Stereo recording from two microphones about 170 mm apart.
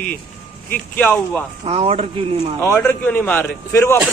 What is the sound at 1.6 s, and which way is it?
Speech, 35° right (ahead or behind).